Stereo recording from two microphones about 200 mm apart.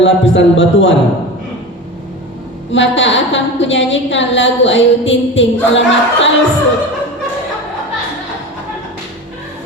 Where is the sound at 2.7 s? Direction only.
70° left (ahead or behind).